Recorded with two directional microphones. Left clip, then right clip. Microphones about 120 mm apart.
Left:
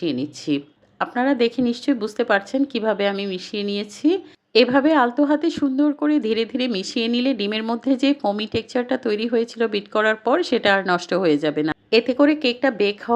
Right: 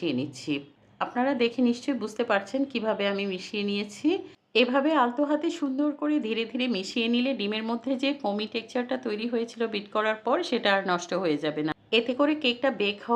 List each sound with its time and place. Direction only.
0.0 s speech: 30° left (ahead or behind)